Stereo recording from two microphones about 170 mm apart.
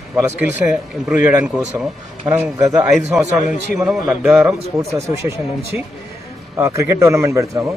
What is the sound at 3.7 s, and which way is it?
Speech, centre (ahead or behind).